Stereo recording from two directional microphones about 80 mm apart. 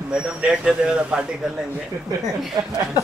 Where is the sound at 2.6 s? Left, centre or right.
Right.